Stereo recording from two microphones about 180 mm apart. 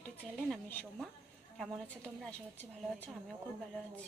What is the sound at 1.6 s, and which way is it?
Speech, 5° left (ahead or behind).